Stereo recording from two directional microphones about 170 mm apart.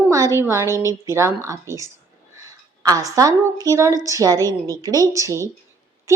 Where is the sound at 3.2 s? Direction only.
20° right (ahead or behind).